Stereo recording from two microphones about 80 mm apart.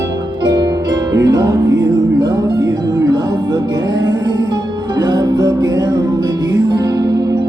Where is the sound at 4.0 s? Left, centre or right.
Right.